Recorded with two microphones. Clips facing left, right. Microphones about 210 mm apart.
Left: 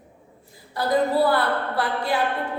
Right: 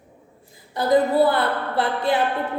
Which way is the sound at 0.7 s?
20° right (ahead or behind).